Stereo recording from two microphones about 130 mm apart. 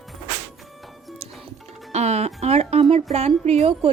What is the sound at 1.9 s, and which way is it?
Speech, 55° right (ahead or behind).